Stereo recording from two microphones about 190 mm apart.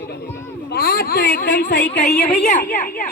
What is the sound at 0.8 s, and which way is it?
Speech, 50° left (ahead or behind).